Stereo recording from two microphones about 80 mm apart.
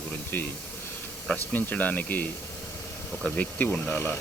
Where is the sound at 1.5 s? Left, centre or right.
Centre.